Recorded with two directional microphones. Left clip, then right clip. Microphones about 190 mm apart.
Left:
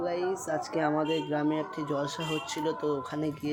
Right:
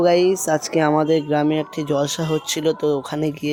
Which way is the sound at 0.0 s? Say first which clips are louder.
Right 15 dB; 50° right (ahead or behind).